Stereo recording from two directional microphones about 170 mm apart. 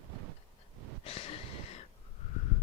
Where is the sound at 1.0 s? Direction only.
35° left (ahead or behind).